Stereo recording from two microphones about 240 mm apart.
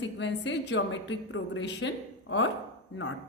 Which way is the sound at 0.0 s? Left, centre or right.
Left.